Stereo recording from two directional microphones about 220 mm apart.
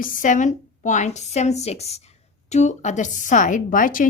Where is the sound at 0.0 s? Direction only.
40° left (ahead or behind).